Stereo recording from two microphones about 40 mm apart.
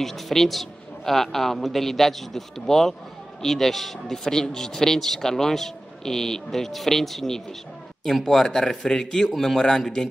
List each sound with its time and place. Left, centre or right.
0.0 s a woman's voice: centre